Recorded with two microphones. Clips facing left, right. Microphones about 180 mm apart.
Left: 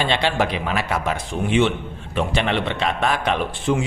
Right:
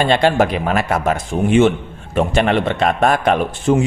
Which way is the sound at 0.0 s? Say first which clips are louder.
Right 7 dB; 45° right (ahead or behind).